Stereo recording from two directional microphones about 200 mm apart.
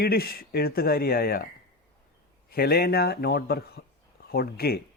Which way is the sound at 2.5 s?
50° left (ahead or behind).